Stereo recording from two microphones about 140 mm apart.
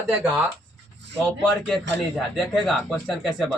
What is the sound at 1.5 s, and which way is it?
Speech, centre (ahead or behind).